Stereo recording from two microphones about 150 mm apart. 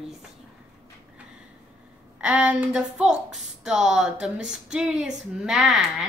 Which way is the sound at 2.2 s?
10° right (ahead or behind).